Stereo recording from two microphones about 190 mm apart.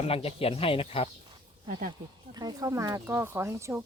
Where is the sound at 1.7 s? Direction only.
45° right (ahead or behind).